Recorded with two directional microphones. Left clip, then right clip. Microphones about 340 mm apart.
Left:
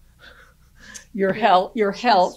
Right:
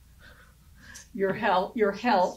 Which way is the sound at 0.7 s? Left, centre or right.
Left.